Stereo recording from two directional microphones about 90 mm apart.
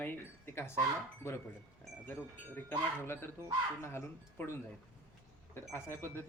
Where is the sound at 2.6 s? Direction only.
25° left (ahead or behind).